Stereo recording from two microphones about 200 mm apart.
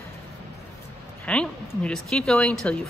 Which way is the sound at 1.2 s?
5° left (ahead or behind).